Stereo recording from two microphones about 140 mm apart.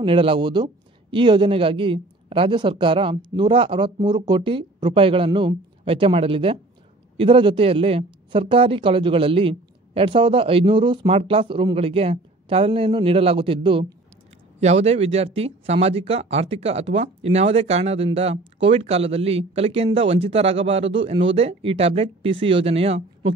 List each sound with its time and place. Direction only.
0.0 s speech: 40° right (ahead or behind)
14.6 s speech: 50° right (ahead or behind)